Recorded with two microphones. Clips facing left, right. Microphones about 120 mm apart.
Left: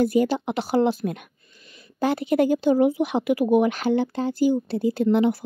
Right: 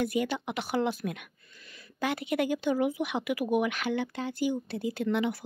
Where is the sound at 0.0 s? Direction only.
35° left (ahead or behind).